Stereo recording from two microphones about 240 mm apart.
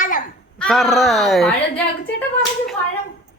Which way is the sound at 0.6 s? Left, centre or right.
Centre.